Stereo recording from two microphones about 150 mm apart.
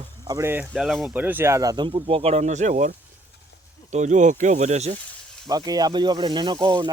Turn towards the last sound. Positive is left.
turn(degrees=-25)  # may be behind; listen again after turning